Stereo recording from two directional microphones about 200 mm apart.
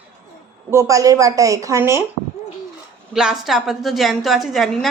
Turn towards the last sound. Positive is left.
turn(degrees=0)  # may be behind; listen again after turning